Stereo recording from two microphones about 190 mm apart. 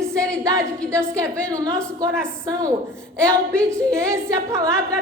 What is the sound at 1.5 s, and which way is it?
A woman's voice, 15° right (ahead or behind).